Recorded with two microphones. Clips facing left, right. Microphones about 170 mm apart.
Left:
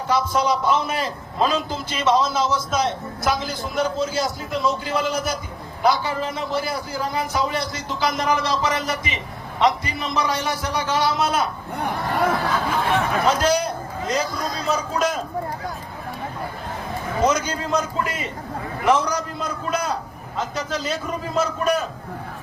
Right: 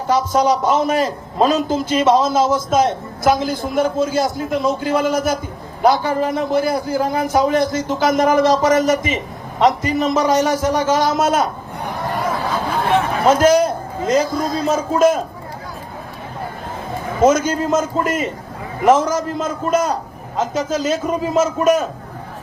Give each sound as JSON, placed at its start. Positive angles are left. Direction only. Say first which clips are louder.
{"t": 0.1, "sound": "a man's voice", "louder": "right 5 dB", "side_deg": -40}
{"t": 13.2, "sound": "a sound", "louder": "right 10 dB", "side_deg": -45}
{"t": 14.3, "sound": "a man's voice", "louder": "right 6 dB", "side_deg": -50}
{"t": 17.2, "sound": "a man's voice", "louder": "right 8 dB", "side_deg": -50}